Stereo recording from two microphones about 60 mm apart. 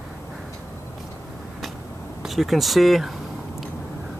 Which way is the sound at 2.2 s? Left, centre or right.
Centre.